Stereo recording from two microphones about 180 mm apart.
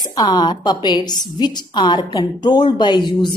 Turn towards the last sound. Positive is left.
turn(degrees=25)  # may be behind; listen again after turning